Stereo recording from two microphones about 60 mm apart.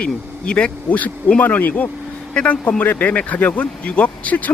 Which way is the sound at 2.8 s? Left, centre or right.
Left.